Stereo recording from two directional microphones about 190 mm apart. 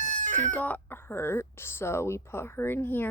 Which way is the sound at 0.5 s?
10° left (ahead or behind).